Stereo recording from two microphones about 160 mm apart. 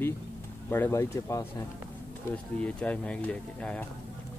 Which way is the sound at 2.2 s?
10° left (ahead or behind).